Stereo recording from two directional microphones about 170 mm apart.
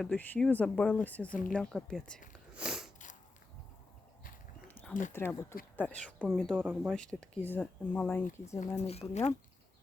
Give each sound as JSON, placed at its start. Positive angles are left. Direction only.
{"t": 0.0, "sound": "speech", "side_deg": 5}
{"t": 1.3, "sound": "speech", "side_deg": 55}
{"t": 1.5, "sound": "speech", "side_deg": 5}
{"t": 2.6, "sound": "sniff", "side_deg": -5}
{"t": 4.7, "sound": "a sound", "side_deg": 10}
{"t": 5.1, "sound": "speech", "side_deg": 15}
{"t": 6.6, "sound": "speech", "side_deg": -10}
{"t": 6.9, "sound": "speech", "side_deg": 5}
{"t": 8.6, "sound": "speech", "side_deg": 40}